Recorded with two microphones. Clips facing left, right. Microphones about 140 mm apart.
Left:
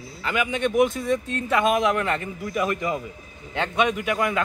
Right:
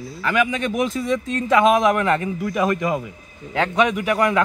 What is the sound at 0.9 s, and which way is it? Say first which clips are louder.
Speech: right 2 dB; 90° right.